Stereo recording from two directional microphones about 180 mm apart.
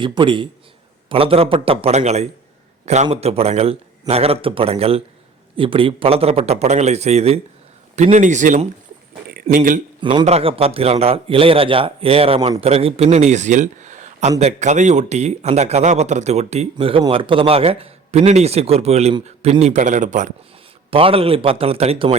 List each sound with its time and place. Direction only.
0.0 s a man's voice: 25° right (ahead or behind); by 9.8 s 45° right (ahead or behind)
10.0 s a man's voice: 25° right (ahead or behind); by 20.3 s 45° right (ahead or behind)
20.9 s a man's voice: 30° right (ahead or behind)